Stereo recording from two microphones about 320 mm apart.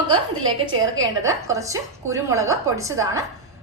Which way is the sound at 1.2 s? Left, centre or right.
Centre.